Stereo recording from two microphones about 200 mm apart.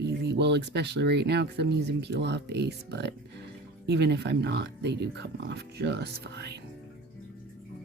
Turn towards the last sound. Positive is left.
turn(degrees=-55)  # may be behind; listen again after turning